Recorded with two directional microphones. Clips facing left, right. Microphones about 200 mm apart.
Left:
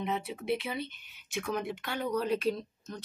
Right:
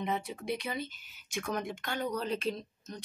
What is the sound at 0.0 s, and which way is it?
Speech, centre (ahead or behind).